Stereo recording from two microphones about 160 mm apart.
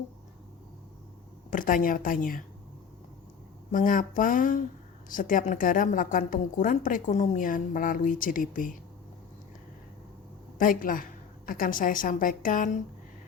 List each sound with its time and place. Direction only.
1.5 s a woman's voice: 55° left (ahead or behind)
3.7 s a woman's voice: 55° left (ahead or behind)
10.6 s a woman's voice: 60° left (ahead or behind)